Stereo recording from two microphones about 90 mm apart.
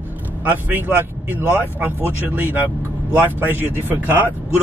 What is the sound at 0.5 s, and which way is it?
Speech, 20° right (ahead or behind).